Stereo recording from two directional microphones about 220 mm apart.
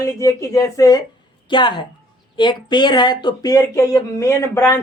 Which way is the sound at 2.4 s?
20° left (ahead or behind).